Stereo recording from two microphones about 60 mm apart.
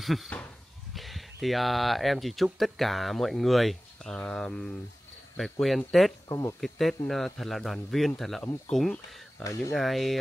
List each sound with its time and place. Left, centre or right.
0.0 s speech: centre
5.4 s speech: centre
6.2 s speech: left
6.6 s speech: centre
9.4 s speech: left
9.8 s speech: centre